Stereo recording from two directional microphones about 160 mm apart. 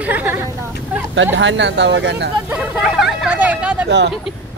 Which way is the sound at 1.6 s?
90° right.